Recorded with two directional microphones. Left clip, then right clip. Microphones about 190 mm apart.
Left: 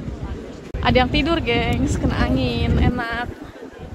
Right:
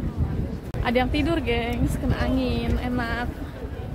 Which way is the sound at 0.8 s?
20° left (ahead or behind).